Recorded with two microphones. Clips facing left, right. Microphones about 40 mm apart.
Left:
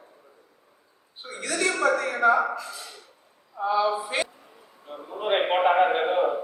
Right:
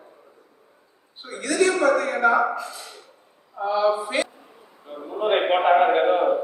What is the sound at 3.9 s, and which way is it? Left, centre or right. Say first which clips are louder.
Speech: right 3 dB; right.